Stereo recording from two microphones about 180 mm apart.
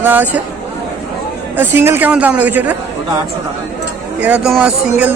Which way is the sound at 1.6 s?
10° right (ahead or behind).